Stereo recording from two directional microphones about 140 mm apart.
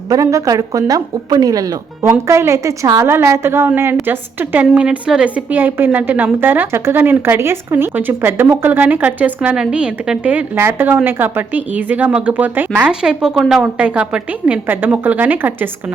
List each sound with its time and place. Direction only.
0.1 s a woman's voice: 25° right (ahead or behind)